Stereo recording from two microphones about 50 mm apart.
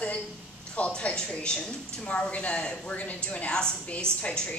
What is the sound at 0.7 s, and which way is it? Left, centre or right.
A woman's voice, left.